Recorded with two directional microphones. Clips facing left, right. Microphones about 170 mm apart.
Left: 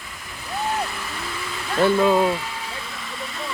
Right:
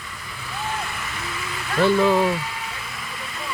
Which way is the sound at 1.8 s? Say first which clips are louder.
Even; 10° left (ahead or behind).